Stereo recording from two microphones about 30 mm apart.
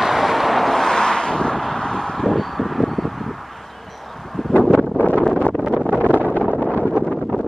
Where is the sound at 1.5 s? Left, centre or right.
Centre.